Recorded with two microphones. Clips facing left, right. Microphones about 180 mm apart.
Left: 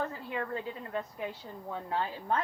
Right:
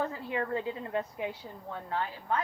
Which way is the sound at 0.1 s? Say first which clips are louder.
Right 3 dB; 20° right (ahead or behind).